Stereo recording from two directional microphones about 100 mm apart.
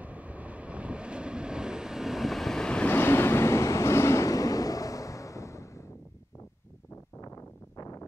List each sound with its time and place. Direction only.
0.0 s vehicle: 15° right (ahead or behind); by 2.9 s 10° left (ahead or behind)
2.9 s train: 25° left (ahead or behind)
7.2 s a sound: 35° left (ahead or behind)